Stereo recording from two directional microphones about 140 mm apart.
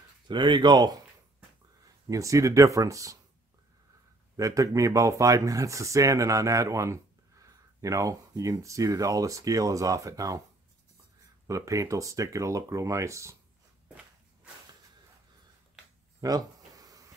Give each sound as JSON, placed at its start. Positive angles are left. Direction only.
{"t": 0.3, "sound": "speech", "side_deg": -35}
{"t": 2.0, "sound": "speech", "side_deg": -25}
{"t": 4.4, "sound": "speech", "side_deg": -25}
{"t": 11.4, "sound": "speech", "side_deg": -20}
{"t": 16.2, "sound": "a sound", "side_deg": -25}